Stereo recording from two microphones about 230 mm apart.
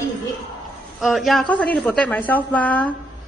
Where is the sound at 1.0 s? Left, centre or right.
Centre.